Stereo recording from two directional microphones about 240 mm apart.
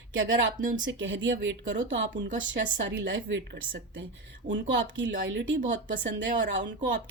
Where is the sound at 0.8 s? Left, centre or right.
Right.